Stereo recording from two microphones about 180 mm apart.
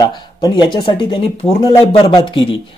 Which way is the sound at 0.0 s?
25° left (ahead or behind).